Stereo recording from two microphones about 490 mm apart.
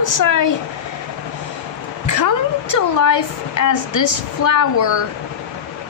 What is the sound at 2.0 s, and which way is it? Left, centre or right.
A woman's voice, left.